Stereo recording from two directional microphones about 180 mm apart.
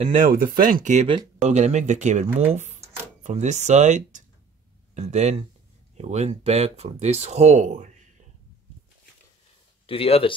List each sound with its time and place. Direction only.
0.1 s speech: 50° right (ahead or behind)
1.0 s speech: 35° right (ahead or behind)
9.8 s speech: 30° left (ahead or behind)